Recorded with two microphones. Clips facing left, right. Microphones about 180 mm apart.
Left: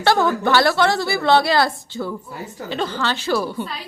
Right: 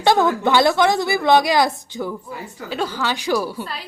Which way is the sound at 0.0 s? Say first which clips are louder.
Right 1 dB; 20° right (ahead or behind).